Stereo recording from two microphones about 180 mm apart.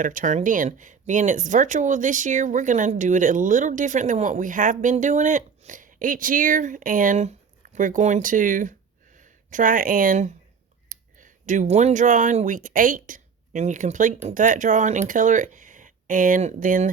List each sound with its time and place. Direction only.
0.0 s speech: 45° right (ahead or behind)